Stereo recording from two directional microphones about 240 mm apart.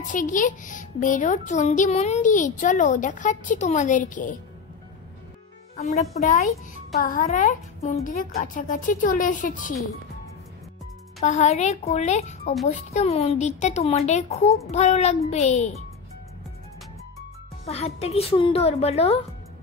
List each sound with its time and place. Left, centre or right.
0.0 s speech: left
7.0 s speech: left
11.1 s a woman's voice: left
17.6 s a woman's voice: left